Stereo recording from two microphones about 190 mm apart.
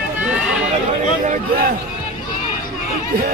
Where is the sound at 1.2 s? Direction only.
40° right (ahead or behind).